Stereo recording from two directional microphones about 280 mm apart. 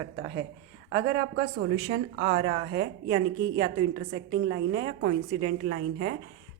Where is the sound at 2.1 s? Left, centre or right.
Centre.